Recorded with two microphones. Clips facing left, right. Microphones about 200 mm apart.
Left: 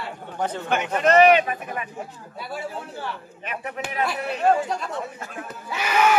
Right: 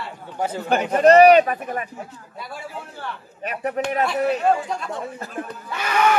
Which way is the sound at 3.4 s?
40° right (ahead or behind).